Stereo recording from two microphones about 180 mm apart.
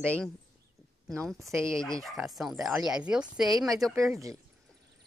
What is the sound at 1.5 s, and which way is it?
Speech, 15° right (ahead or behind).